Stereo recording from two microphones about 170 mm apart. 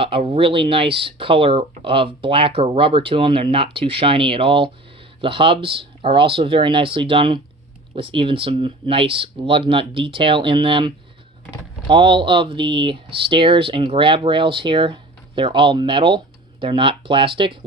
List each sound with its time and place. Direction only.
0.0 s speech: 35° right (ahead or behind)
11.9 s speech: 30° right (ahead or behind)